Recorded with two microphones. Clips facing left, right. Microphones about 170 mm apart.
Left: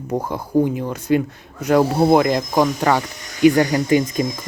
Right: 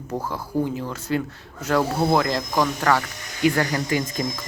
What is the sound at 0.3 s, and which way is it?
Speech, 20° left (ahead or behind).